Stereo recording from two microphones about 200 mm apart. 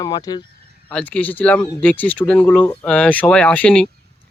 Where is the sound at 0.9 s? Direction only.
10° left (ahead or behind).